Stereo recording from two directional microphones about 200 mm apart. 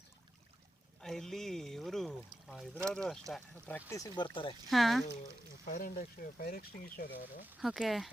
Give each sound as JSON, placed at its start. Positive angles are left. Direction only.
{"t": 1.0, "sound": "a sound", "side_deg": 0}
{"t": 2.8, "sound": "speech", "side_deg": 5}
{"t": 4.7, "sound": "speech", "side_deg": 0}
{"t": 5.6, "sound": "speech", "side_deg": 45}
{"t": 7.5, "sound": "speech", "side_deg": -5}